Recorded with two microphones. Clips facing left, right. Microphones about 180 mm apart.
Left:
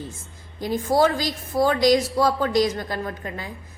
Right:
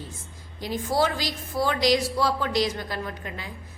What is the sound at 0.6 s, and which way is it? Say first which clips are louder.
A woman's voice: left 5 dB; 45° left (ahead or behind).